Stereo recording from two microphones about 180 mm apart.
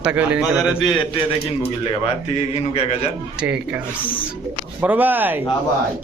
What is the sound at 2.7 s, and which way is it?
Speech, 35° left (ahead or behind).